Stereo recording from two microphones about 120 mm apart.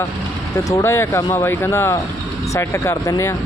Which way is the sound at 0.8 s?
20° left (ahead or behind).